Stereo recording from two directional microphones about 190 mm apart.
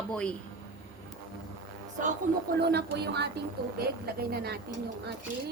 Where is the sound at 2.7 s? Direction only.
60° right (ahead or behind).